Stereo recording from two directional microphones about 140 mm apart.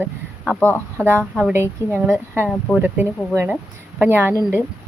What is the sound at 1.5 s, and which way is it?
A woman's voice, 15° right (ahead or behind).